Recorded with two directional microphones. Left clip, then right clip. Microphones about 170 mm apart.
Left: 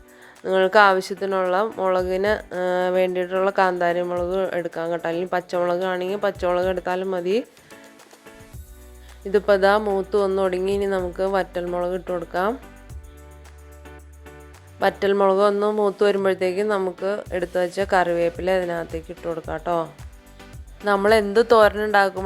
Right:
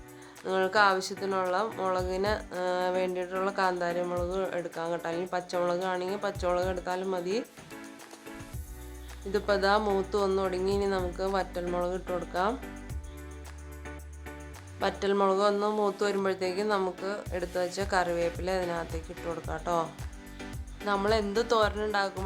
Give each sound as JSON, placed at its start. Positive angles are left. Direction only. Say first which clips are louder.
{"t": 0.4, "sound": "speech", "louder": "left 9 dB", "side_deg": 35}
{"t": 9.3, "sound": "speech", "louder": "left 9 dB", "side_deg": 35}
{"t": 9.9, "sound": "speech", "louder": "left 7 dB", "side_deg": 20}
{"t": 14.8, "sound": "speech", "louder": "left 8 dB", "side_deg": 35}
{"t": 20.8, "sound": "speech", "louder": "left 10 dB", "side_deg": 35}